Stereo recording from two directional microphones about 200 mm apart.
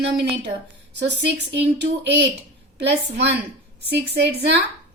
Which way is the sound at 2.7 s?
60° right (ahead or behind).